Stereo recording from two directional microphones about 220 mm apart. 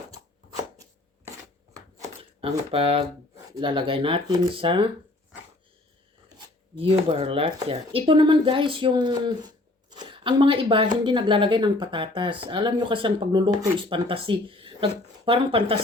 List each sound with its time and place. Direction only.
1.7 s shuffling cards: 20° right (ahead or behind)
3.5 s speech: 20° right (ahead or behind)
7.1 s speech: 25° right (ahead or behind)